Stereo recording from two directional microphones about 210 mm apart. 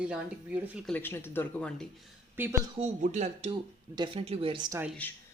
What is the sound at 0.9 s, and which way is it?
Speech, 10° left (ahead or behind).